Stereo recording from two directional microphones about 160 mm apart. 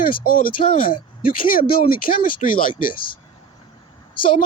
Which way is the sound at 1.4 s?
60° left (ahead or behind).